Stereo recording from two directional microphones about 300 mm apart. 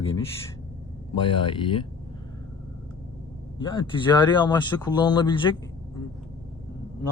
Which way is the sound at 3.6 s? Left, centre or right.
Centre.